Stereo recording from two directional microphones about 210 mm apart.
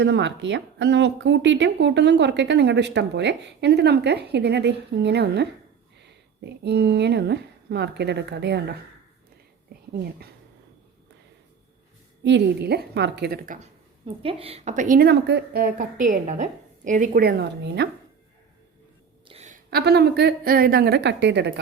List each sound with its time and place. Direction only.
0.0 s speech: 55° right (ahead or behind)
12.2 s a woman's voice: 55° right (ahead or behind)
14.2 s a woman's voice: 25° right (ahead or behind); by 17.8 s 50° right (ahead or behind)
19.3 s a sound: 30° right (ahead or behind)
19.7 s a woman's voice: 50° right (ahead or behind)